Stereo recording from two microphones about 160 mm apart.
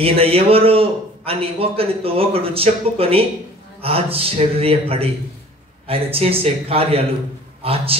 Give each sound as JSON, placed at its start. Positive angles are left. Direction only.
{"t": 0.0, "sound": "a man's voice", "side_deg": -35}